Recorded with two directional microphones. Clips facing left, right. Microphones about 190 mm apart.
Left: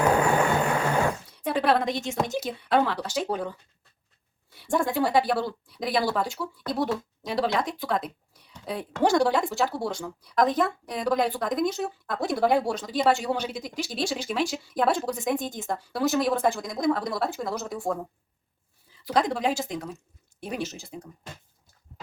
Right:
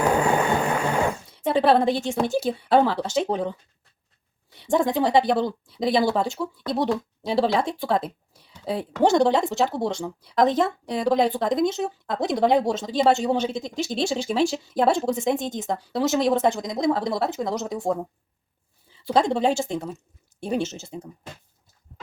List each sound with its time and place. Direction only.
1.4 s speech: 25° right (ahead or behind)
4.5 s speech: 20° right (ahead or behind)
19.0 s speech: 25° right (ahead or behind)